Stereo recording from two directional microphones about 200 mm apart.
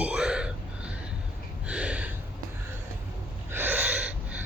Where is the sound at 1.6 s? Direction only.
5° right (ahead or behind).